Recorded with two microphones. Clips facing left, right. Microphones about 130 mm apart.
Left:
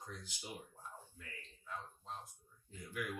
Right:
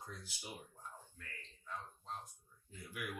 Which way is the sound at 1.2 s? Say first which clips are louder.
Left 1 dB; 10° left (ahead or behind).